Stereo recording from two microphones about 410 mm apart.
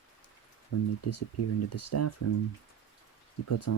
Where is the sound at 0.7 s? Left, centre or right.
Left.